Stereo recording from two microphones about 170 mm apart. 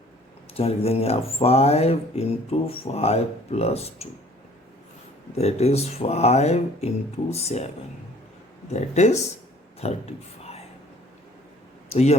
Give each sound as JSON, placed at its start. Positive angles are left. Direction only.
{"t": 0.5, "sound": "speech", "side_deg": 35}
{"t": 5.4, "sound": "speech", "side_deg": 40}
{"t": 8.7, "sound": "speech", "side_deg": 40}
{"t": 11.9, "sound": "speech", "side_deg": 40}